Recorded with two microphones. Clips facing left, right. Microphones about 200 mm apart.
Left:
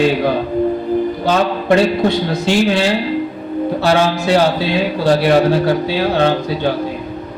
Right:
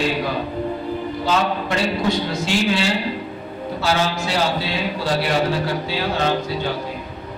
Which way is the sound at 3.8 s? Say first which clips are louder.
Left 5 dB; 60° left (ahead or behind).